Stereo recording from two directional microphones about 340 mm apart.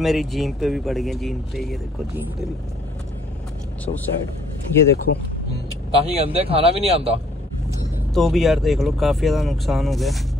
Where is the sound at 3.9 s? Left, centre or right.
Left.